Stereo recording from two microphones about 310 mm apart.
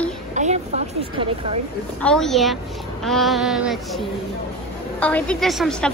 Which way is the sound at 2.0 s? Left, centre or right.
Centre.